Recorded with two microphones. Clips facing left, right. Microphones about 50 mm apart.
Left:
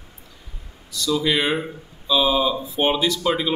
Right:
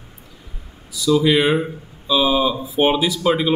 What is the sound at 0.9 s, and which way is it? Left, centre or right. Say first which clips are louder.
Speech: right 5 dB; centre.